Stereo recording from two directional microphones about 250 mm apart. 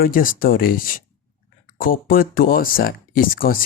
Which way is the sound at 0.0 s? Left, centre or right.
Left.